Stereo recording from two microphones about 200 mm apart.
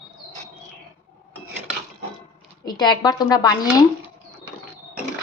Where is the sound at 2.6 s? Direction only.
20° left (ahead or behind).